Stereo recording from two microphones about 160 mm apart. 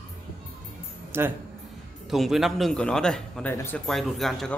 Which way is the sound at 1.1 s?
15° right (ahead or behind).